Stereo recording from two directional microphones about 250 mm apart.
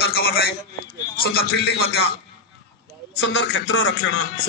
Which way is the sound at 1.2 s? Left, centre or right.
Left.